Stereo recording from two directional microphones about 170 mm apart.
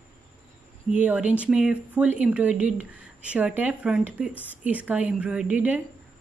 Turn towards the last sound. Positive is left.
turn(degrees=-10)  # may be behind; listen again after turning